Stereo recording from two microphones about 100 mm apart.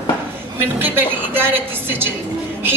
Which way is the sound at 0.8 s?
20° right (ahead or behind).